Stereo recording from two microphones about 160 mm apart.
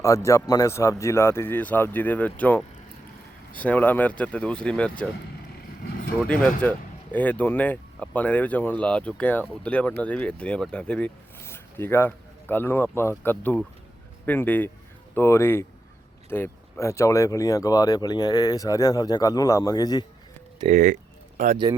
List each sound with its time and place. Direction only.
0.0 s speech: 20° left (ahead or behind)
5.8 s vehicle: 75° left (ahead or behind)
6.1 s speech: 10° left (ahead or behind); by 20.1 s 25° left (ahead or behind)
20.7 s a sound: 50° right (ahead or behind)